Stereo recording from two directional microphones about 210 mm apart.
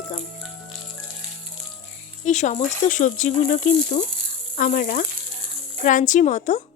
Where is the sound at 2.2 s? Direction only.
35° left (ahead or behind).